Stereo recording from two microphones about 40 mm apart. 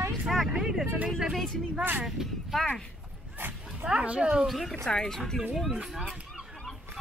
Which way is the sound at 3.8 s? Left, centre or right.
Right.